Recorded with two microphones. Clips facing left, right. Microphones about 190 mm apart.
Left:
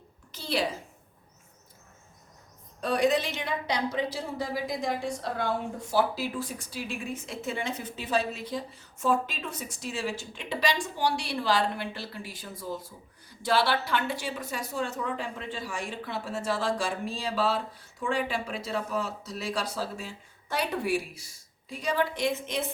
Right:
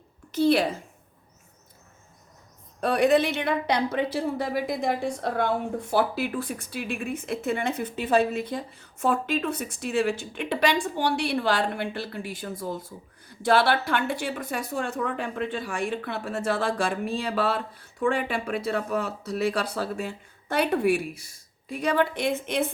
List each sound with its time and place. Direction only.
0.3 s a woman's voice: 55° right (ahead or behind)
2.8 s speech: 60° right (ahead or behind)